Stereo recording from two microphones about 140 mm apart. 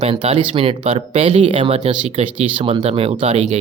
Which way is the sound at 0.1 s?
40° right (ahead or behind).